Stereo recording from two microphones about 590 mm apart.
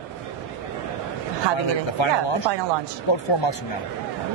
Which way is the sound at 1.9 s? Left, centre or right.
Left.